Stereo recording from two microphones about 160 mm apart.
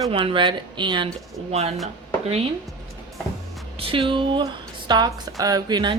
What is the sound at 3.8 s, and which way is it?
Speech, 35° right (ahead or behind).